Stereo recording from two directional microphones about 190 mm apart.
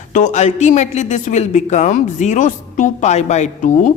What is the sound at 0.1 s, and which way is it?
A woman's voice, 40° left (ahead or behind).